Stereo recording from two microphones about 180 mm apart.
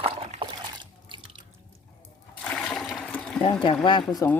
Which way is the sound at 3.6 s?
25° left (ahead or behind).